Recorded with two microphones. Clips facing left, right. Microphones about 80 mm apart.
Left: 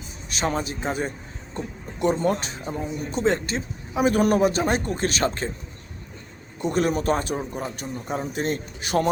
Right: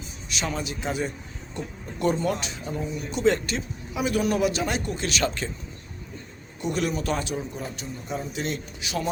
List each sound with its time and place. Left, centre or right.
0.3 s a man's voice: left
4.0 s a man's voice: left
6.6 s a man's voice: left